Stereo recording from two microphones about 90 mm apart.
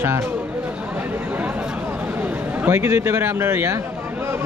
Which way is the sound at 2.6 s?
25° right (ahead or behind).